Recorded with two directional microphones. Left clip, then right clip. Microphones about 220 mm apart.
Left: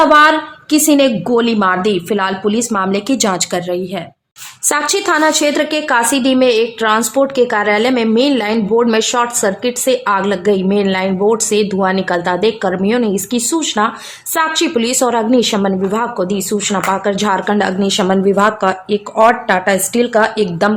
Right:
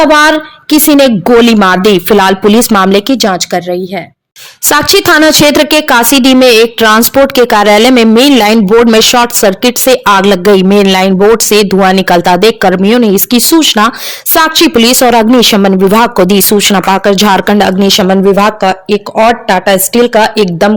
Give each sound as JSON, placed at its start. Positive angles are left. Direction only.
{"t": 0.0, "sound": "a woman's voice", "side_deg": -35}
{"t": 3.2, "sound": "speech", "side_deg": -20}
{"t": 4.7, "sound": "a woman's voice", "side_deg": -35}